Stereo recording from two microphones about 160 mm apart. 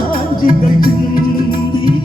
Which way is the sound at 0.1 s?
65° left (ahead or behind).